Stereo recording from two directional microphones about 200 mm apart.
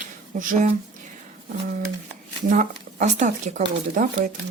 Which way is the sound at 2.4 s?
35° right (ahead or behind).